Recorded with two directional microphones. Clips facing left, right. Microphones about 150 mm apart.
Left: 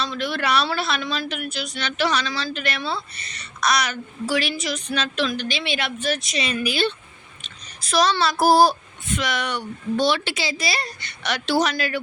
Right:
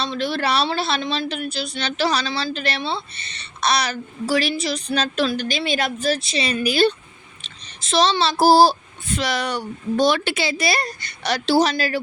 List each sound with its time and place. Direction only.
0.0 s a woman's voice: 30° right (ahead or behind)
7.4 s a woman's voice: 25° right (ahead or behind)